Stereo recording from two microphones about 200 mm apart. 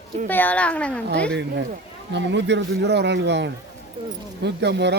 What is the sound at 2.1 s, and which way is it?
Speech, 60° right (ahead or behind).